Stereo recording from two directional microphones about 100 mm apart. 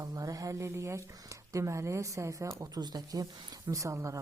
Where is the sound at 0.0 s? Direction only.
35° right (ahead or behind).